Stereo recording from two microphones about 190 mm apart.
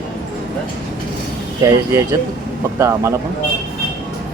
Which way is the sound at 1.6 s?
15° right (ahead or behind).